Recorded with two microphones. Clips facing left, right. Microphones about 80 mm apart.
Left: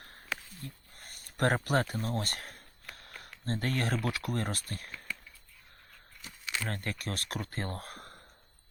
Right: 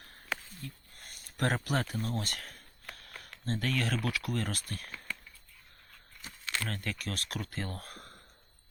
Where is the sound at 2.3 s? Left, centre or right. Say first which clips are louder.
Left 1 dB; left.